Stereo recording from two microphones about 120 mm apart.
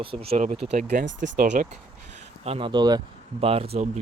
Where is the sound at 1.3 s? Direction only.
85° right.